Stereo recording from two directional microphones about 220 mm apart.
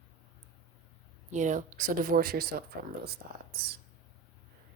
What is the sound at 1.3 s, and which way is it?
Speech, 35° right (ahead or behind).